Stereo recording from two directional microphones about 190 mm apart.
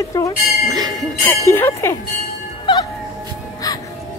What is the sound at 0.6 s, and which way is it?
Clang, 20° right (ahead or behind).